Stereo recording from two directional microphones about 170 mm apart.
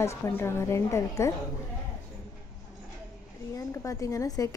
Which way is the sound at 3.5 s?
20° left (ahead or behind).